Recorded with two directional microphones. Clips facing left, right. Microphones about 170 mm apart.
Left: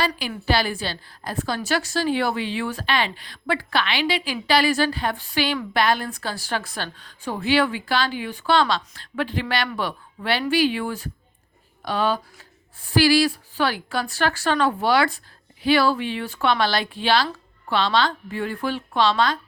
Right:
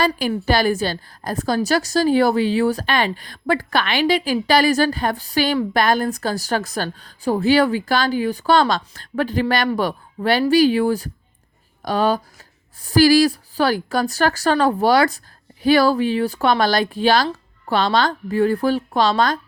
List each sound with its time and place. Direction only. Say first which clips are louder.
0.2 s a woman's voice: right 5 dB; 45° right (ahead or behind)